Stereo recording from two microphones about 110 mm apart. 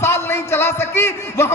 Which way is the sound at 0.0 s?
20° left (ahead or behind).